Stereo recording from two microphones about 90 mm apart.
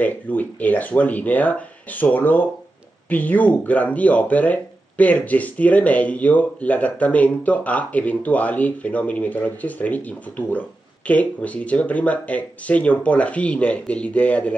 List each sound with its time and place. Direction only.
0.0 s speech: 20° left (ahead or behind)